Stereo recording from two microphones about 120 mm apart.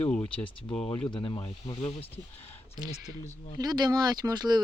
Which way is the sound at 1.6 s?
55° left (ahead or behind).